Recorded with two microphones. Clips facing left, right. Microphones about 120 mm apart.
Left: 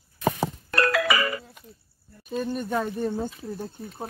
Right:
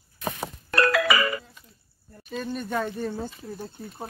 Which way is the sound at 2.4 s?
5° left (ahead or behind).